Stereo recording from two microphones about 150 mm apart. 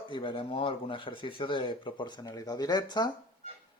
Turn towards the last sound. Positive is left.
turn(degrees=25)  # may be behind; listen again after turning